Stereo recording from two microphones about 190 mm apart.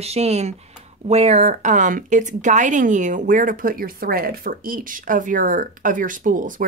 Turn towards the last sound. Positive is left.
turn(degrees=-45)  # may be behind; listen again after turning